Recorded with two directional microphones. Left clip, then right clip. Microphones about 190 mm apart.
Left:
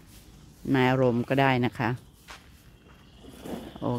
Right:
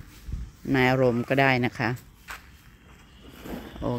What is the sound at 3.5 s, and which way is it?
Vehicle, 50° left (ahead or behind).